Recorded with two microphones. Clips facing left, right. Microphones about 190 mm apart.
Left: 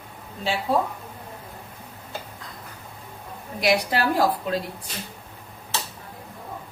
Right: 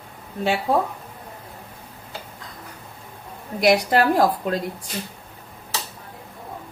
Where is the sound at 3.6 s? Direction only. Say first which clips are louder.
Right 5 dB; 50° right (ahead or behind).